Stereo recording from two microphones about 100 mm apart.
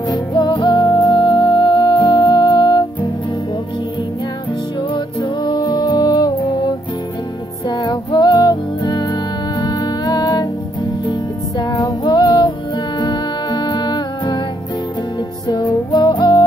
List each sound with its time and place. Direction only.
0.0 s music: 45° left (ahead or behind)
4.9 s music: 50° left (ahead or behind)
15.4 s music: 40° left (ahead or behind)